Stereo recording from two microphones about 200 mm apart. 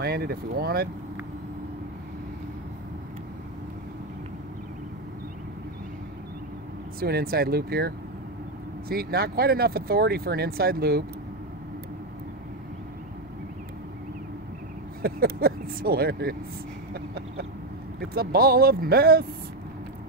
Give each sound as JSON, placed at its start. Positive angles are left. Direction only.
{"t": 0.0, "sound": "speech", "side_deg": -50}
{"t": 7.0, "sound": "speech", "side_deg": -50}
{"t": 15.0, "sound": "speech", "side_deg": -50}
{"t": 16.9, "sound": "a sound", "side_deg": -55}
{"t": 18.1, "sound": "speech", "side_deg": -50}